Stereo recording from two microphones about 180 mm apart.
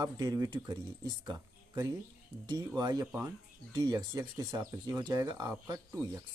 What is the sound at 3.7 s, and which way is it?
Speech, 20° right (ahead or behind).